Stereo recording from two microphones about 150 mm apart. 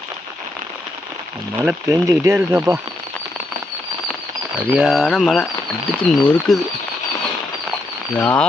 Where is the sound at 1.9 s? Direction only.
20° right (ahead or behind).